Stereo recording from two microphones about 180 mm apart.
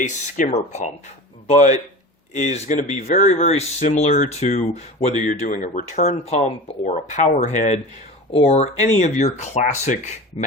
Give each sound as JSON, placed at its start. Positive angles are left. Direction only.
{"t": 0.0, "sound": "speech", "side_deg": 45}